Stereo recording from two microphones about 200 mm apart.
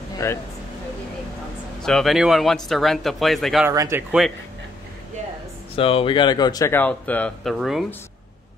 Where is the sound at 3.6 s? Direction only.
15° right (ahead or behind).